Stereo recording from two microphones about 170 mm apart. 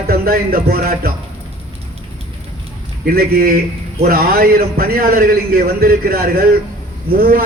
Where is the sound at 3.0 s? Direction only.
60° right (ahead or behind).